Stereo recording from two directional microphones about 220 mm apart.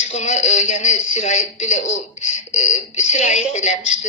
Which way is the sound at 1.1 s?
30° left (ahead or behind).